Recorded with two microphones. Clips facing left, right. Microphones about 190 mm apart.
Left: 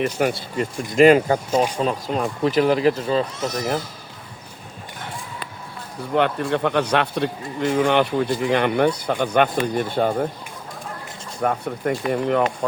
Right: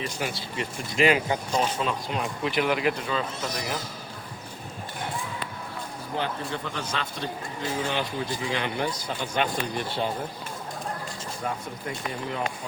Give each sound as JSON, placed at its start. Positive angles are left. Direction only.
{"t": 0.0, "sound": "speech", "side_deg": 55}
{"t": 6.1, "sound": "a man's voice", "side_deg": 65}
{"t": 11.4, "sound": "a man's voice", "side_deg": 65}